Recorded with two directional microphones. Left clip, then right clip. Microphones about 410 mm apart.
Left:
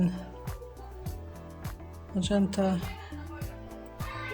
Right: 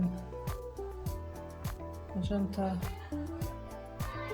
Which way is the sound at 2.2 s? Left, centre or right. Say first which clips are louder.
Left 7 dB; right.